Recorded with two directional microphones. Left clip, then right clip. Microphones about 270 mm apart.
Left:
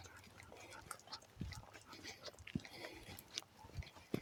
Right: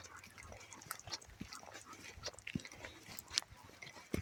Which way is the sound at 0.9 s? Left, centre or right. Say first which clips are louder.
Right 7 dB; right.